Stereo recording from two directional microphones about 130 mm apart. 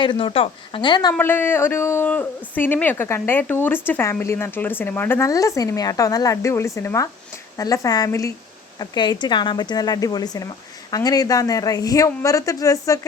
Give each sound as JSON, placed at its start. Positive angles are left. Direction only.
{"t": 0.0, "sound": "speech", "side_deg": 40}
{"t": 1.1, "sound": "speech", "side_deg": 15}